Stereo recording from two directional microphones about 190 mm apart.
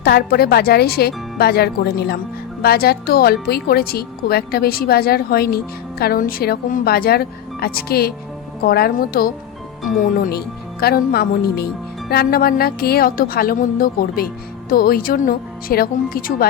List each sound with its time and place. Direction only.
0.0 s a woman's voice: 55° left (ahead or behind)